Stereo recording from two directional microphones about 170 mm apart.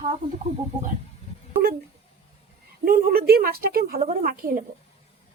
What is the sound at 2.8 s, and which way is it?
Speech, 60° right (ahead or behind).